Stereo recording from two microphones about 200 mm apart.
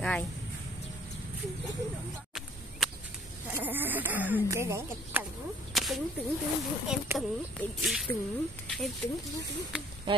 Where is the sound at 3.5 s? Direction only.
10° right (ahead or behind).